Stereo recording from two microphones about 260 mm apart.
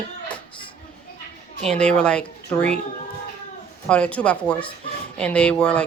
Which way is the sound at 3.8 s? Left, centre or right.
Centre.